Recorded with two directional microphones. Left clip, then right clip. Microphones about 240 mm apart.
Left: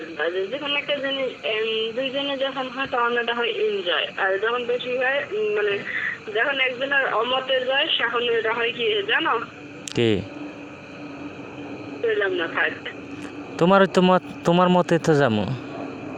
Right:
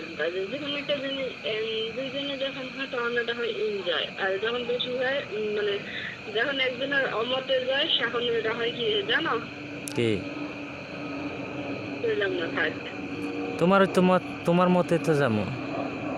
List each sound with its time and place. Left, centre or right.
0.2 s speech: left
12.0 s speech: left
14.5 s speech: left
14.8 s speech: left